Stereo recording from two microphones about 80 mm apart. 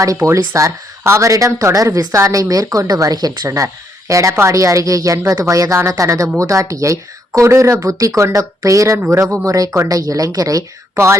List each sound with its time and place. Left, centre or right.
0.0 s speech: right
4.1 s speech: right
10.9 s speech: right